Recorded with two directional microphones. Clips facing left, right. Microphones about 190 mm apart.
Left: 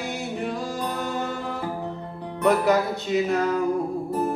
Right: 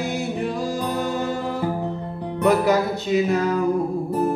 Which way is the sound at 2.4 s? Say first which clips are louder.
Right 2 dB; 5° right (ahead or behind).